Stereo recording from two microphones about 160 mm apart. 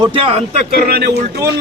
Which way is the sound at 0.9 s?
90° right.